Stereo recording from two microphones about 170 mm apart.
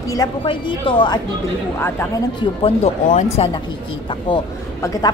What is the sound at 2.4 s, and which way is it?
A woman's voice, 30° left (ahead or behind).